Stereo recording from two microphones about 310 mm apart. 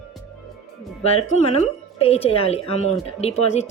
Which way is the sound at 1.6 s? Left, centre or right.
Centre.